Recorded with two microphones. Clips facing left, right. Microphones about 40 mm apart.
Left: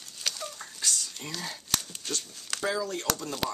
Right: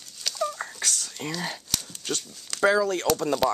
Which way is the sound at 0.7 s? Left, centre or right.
Right.